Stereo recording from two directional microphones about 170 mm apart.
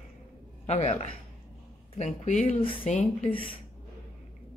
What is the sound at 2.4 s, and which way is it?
Speech, 30° left (ahead or behind).